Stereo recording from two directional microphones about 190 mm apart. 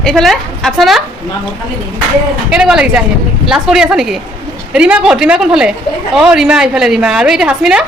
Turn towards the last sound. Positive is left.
turn(degrees=-5)  # may be behind; listen again after turning